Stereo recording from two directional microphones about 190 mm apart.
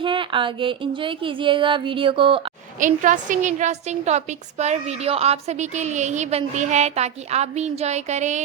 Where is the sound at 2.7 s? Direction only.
40° right (ahead or behind).